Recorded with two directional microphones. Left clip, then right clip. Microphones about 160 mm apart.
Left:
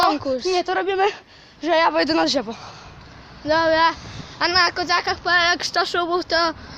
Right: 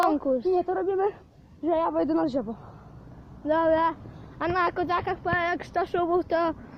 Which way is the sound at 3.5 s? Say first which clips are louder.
Left 6 dB; 20° left (ahead or behind).